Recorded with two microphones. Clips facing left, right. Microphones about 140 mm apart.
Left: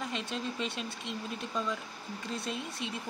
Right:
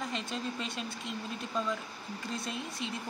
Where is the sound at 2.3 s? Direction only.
Centre (ahead or behind).